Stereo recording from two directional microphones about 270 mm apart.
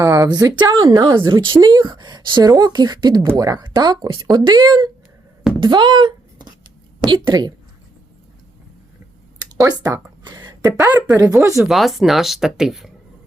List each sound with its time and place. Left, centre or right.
0.0 s speech: centre
5.5 s a sound: centre
7.0 s speech: centre
9.6 s a woman's voice: centre
11.7 s speech: centre